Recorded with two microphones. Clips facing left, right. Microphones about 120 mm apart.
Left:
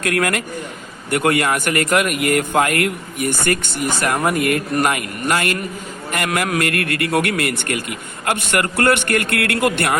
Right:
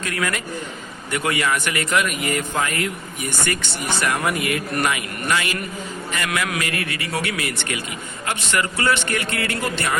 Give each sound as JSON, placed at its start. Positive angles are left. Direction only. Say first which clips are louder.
{"t": 0.0, "sound": "a man's voice", "louder": "left 6 dB", "side_deg": 60}
{"t": 6.7, "sound": "a man's voice", "louder": "left 6 dB", "side_deg": 60}